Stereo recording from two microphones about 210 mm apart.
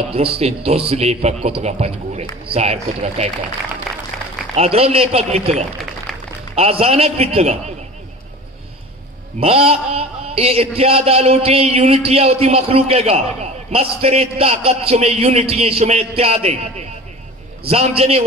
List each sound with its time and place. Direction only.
0.1 s a man's voice: 25° right (ahead or behind)
4.6 s a man's voice: 30° right (ahead or behind)
6.1 s a sound: centre (ahead or behind)
6.5 s a man's voice: 30° right (ahead or behind)
9.4 s a man's voice: 30° right (ahead or behind)